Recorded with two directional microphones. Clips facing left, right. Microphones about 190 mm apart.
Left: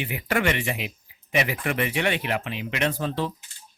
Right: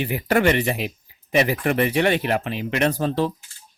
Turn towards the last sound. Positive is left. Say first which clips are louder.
# right 5 dB
turn(degrees=-40)  # may be behind; listen again after turning